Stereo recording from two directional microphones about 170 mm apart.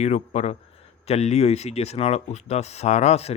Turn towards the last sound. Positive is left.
turn(degrees=40)  # may be behind; listen again after turning